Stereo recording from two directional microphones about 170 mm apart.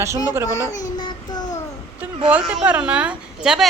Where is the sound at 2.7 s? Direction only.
10° right (ahead or behind).